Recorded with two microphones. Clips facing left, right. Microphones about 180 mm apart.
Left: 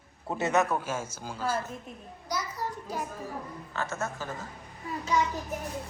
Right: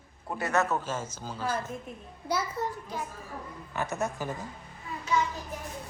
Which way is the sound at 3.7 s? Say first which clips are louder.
Right 2 dB; 15° right (ahead or behind).